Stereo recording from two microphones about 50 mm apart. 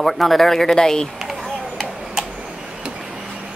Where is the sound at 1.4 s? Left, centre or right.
Centre.